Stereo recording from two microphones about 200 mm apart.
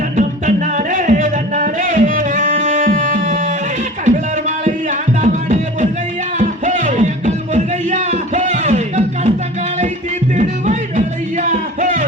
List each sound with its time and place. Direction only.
0.2 s music: 40° right (ahead or behind)
10.3 s music: 40° right (ahead or behind)